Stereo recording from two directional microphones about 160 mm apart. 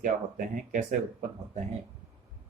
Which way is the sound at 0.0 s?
60° right (ahead or behind).